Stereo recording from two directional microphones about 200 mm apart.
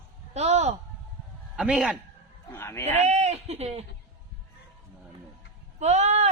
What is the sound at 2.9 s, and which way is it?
Speech, 35° right (ahead or behind).